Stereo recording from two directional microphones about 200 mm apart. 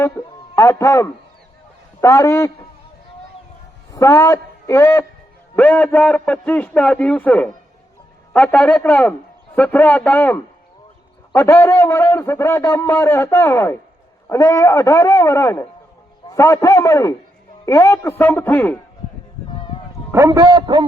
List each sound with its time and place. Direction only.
0.0 s a sound: 15° left (ahead or behind)
2.0 s a man's voice: 15° left (ahead or behind)
3.9 s a man's voice: 15° left (ahead or behind)
20.1 s a man's voice: 15° right (ahead or behind)